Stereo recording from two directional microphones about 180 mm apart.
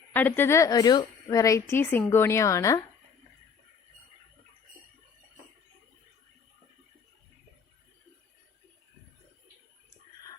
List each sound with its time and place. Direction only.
0.1 s speech: 10° left (ahead or behind)